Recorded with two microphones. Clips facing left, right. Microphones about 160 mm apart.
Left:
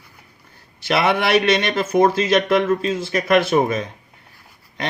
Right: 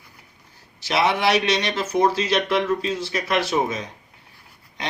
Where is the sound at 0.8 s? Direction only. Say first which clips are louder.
Left 3 dB; 55° left (ahead or behind).